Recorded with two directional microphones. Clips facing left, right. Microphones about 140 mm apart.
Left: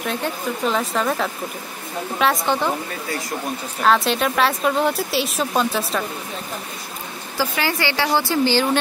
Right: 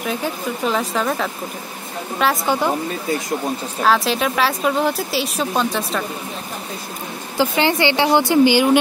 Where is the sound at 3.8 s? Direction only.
Centre (ahead or behind).